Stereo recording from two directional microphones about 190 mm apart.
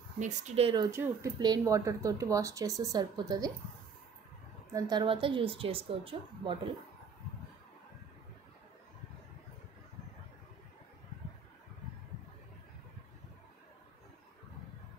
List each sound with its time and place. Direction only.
0.2 s speech: 40° right (ahead or behind)
0.9 s speech: 20° right (ahead or behind)
4.7 s a woman's voice: 20° right (ahead or behind)